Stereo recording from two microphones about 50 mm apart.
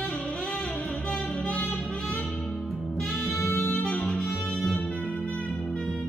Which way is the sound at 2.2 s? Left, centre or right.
Centre.